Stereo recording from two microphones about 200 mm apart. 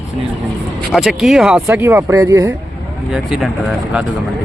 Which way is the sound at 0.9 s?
Centre (ahead or behind).